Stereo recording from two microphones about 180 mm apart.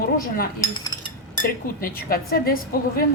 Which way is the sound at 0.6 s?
25° left (ahead or behind).